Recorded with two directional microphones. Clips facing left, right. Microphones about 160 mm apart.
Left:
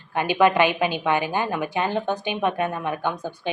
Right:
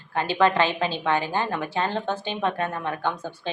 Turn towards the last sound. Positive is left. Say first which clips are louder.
# left 2 dB
turn(degrees=15)  # may be behind; listen again after turning